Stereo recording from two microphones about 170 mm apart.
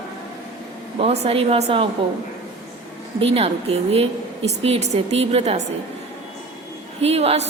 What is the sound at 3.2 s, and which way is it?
A woman's voice, 35° right (ahead or behind).